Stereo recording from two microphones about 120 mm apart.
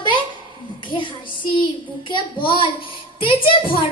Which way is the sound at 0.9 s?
45° left (ahead or behind).